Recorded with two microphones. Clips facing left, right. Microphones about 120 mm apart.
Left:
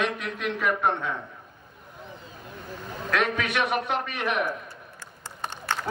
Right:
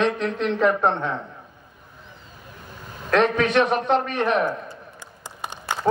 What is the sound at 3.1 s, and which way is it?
A man's voice, 40° right (ahead or behind).